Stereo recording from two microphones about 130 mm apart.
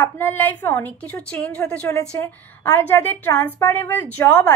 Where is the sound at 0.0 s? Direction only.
15° left (ahead or behind).